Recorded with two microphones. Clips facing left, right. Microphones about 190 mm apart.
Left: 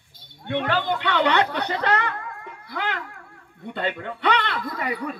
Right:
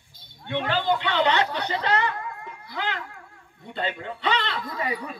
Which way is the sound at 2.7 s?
55° left (ahead or behind).